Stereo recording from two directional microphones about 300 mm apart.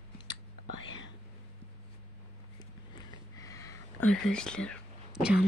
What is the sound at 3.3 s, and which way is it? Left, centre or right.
Whispering, centre.